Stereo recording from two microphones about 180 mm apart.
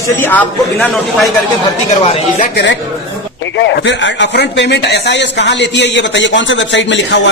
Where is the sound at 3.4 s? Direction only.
80° left.